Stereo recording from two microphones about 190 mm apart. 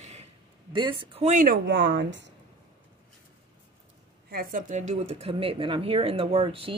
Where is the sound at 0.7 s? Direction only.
25° right (ahead or behind); by 1.6 s 45° right (ahead or behind).